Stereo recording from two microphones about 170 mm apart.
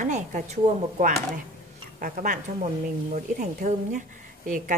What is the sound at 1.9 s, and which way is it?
Speech, 55° right (ahead or behind).